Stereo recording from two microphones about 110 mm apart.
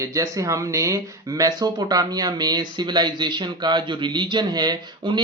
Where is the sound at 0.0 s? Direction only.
30° right (ahead or behind).